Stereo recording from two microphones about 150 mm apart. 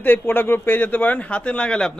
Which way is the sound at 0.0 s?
15° left (ahead or behind).